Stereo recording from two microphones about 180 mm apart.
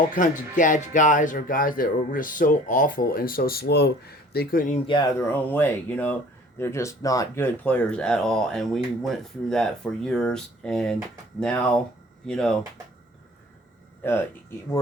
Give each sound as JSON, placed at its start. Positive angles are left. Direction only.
{"t": 0.1, "sound": "speech", "side_deg": 45}
{"t": 5.3, "sound": "speech", "side_deg": 10}
{"t": 14.0, "sound": "speech", "side_deg": 15}